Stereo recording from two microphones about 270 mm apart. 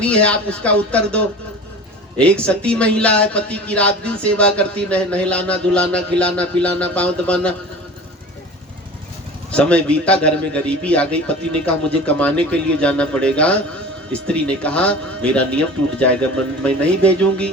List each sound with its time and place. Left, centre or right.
0.0 s a man's voice: centre
9.5 s a man's voice: centre